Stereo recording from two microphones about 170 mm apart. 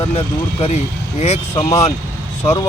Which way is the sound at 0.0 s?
35° left (ahead or behind).